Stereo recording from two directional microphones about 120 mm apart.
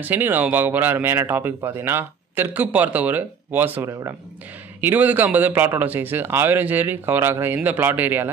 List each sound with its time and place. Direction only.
0.0 s speech: 15° right (ahead or behind)